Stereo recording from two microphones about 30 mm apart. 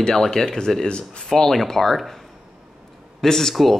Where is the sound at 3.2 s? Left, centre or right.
Centre.